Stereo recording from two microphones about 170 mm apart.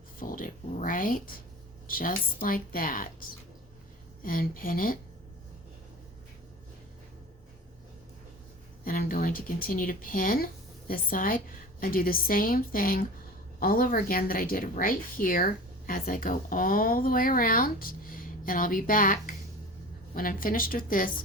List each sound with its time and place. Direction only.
0.2 s a woman's voice: 55° left (ahead or behind)
8.8 s a woman's voice: 55° left (ahead or behind)